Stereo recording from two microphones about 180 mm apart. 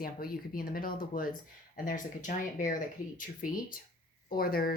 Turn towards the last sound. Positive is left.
turn(degrees=55)  # may be behind; listen again after turning